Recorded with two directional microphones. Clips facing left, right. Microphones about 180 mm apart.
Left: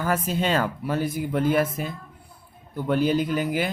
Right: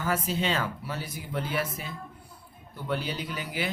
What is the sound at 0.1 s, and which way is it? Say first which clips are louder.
A man's voice: left 4 dB; 50° left (ahead or behind).